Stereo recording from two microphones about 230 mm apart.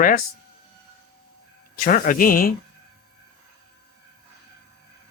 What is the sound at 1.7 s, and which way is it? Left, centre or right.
Speech, left.